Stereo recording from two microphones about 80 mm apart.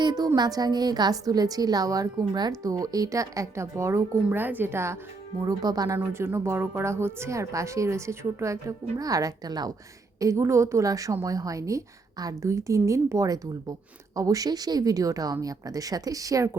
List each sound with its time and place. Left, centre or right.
0.0 s a woman's voice: right
4.3 s speech: right
5.5 s a woman's voice: right
6.1 s speech: right
10.2 s a woman's voice: right